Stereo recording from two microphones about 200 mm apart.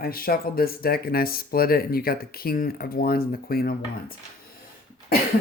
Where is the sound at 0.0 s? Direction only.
45° left (ahead or behind).